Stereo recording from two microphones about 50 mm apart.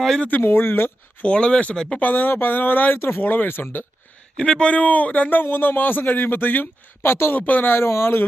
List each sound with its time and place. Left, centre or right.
0.3 s speech: left
1.2 s a man's voice: centre
2.0 s speech: left
4.4 s a man's voice: centre
4.7 s speech: left
7.3 s speech: left
7.8 s speech: left